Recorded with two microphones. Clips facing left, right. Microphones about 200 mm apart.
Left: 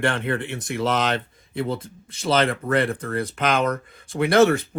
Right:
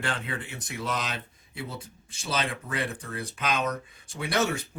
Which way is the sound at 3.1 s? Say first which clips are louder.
Left 7 dB; 75° left (ahead or behind).